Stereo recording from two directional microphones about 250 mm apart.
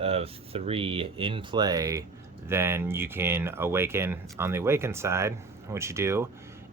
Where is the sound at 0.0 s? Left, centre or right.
Right.